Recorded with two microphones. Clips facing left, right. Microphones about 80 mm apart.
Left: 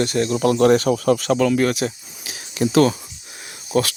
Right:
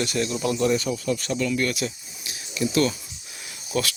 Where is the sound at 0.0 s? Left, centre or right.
Left.